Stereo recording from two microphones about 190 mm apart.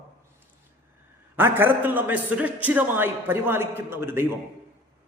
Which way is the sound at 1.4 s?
10° right (ahead or behind).